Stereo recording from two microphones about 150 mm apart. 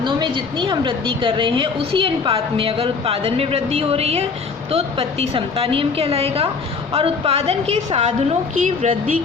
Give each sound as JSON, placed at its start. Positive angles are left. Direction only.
{"t": 0.0, "sound": "a woman's voice", "side_deg": -30}